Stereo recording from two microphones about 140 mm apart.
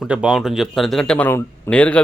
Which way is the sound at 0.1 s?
5° right (ahead or behind).